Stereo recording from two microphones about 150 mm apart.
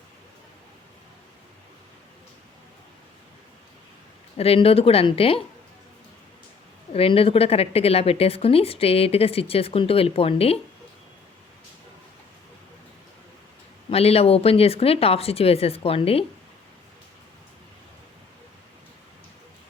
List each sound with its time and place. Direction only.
4.4 s a woman's voice: 40° left (ahead or behind)
6.9 s a woman's voice: 40° left (ahead or behind)
13.9 s a woman's voice: 45° left (ahead or behind)